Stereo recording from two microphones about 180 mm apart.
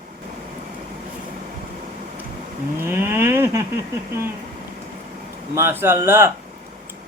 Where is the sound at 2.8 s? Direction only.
15° right (ahead or behind).